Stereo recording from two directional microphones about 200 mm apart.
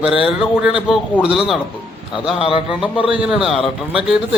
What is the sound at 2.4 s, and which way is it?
Speech, 25° left (ahead or behind).